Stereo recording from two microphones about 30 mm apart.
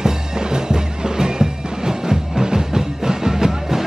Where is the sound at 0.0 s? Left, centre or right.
Right.